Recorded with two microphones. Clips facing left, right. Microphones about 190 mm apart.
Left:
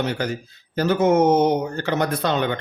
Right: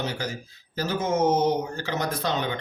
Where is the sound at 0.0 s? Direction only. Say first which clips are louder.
Left 6 dB; 60° left (ahead or behind).